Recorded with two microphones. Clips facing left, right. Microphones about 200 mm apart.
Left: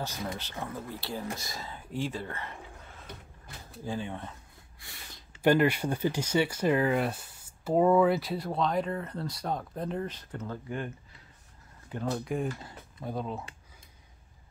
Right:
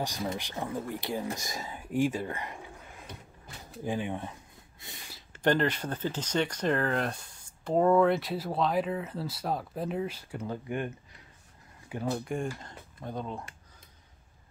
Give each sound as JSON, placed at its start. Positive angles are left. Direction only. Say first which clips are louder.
{"t": 0.0, "sound": "speech", "louder": "right 3 dB", "side_deg": -15}
{"t": 5.4, "sound": "speech", "louder": "left 3 dB", "side_deg": 10}
{"t": 11.9, "sound": "speech", "louder": "even", "side_deg": -10}